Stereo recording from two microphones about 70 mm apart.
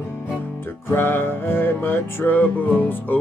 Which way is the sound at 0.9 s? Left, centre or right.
Left.